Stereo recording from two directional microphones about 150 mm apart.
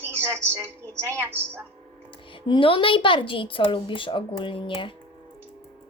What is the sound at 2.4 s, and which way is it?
A woman's voice, 35° left (ahead or behind).